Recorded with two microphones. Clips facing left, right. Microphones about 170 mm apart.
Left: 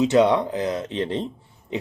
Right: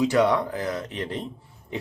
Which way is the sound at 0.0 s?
20° left (ahead or behind).